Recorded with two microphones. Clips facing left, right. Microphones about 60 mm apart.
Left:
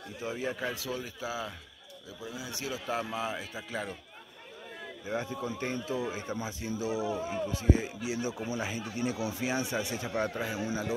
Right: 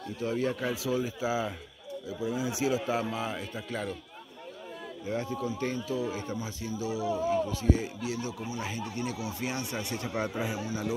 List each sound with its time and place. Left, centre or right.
0.2 s a man's voice: centre
3.0 s speech: centre
5.0 s a man's voice: left
8.5 s speech: centre